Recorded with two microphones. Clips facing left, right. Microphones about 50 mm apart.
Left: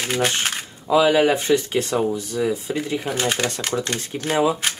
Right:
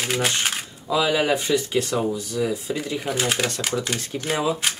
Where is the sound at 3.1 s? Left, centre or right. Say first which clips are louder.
Right 1 dB; centre.